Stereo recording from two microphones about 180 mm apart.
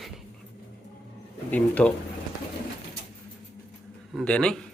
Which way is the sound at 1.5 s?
5° left (ahead or behind).